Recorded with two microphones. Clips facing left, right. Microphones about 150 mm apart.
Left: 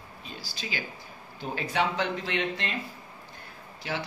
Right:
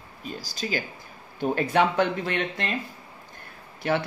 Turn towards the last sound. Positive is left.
turn(degrees=-60)  # may be behind; listen again after turning